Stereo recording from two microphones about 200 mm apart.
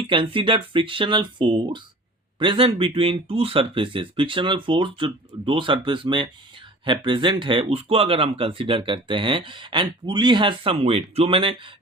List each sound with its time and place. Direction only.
0.1 s speech: 25° right (ahead or behind)